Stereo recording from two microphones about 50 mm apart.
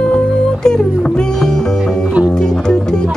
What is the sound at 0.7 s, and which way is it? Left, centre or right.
Music, centre.